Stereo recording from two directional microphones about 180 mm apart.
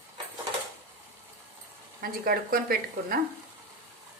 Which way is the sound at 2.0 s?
55° right (ahead or behind).